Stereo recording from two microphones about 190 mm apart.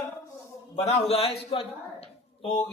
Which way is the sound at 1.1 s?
30° left (ahead or behind).